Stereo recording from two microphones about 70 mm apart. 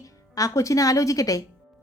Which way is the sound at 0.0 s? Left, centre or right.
Left.